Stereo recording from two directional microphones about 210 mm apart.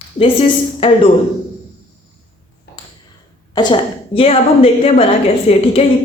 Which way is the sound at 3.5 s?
20° left (ahead or behind).